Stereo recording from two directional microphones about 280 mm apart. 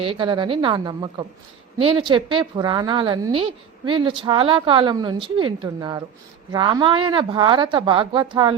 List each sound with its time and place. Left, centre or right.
0.0 s a woman's voice: centre